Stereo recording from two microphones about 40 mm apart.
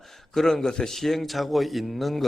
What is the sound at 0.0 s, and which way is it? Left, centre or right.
Speech, centre.